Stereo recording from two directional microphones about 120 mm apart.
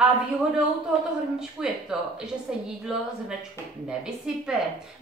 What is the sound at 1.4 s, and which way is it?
A woman's voice, 5° right (ahead or behind).